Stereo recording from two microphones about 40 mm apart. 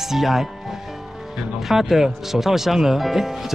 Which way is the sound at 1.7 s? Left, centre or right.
Centre.